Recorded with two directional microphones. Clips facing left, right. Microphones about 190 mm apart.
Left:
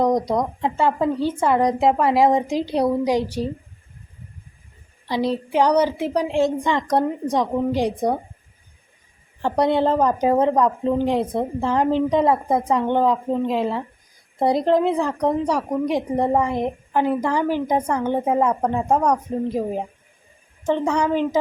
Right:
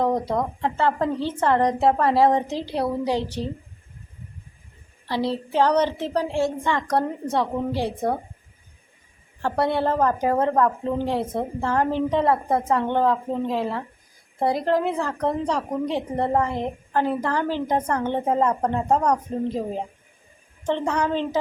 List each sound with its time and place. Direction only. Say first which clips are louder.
0.0 s a woman's voice: left 3 dB; 15° left (ahead or behind)
5.0 s a woman's voice: left 3 dB; 15° left (ahead or behind)
9.4 s a woman's voice: left 4 dB; 20° left (ahead or behind)